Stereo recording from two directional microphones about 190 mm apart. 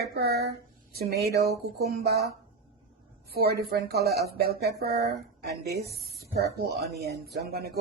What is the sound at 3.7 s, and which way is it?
Speech, 55° right (ahead or behind).